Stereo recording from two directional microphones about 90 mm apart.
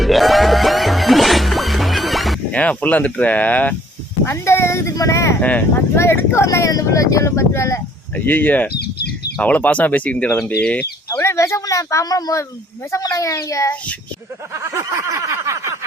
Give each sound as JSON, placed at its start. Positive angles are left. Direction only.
{"t": 0.0, "sound": "music", "side_deg": 0}
{"t": 2.5, "sound": "speech", "side_deg": 15}
{"t": 4.3, "sound": "speech", "side_deg": 30}
{"t": 5.4, "sound": "speech", "side_deg": 15}
{"t": 6.0, "sound": "speech", "side_deg": 30}
{"t": 8.1, "sound": "speech", "side_deg": 20}
{"t": 11.2, "sound": "speech", "side_deg": 30}
{"t": 14.5, "sound": "snicker", "side_deg": -30}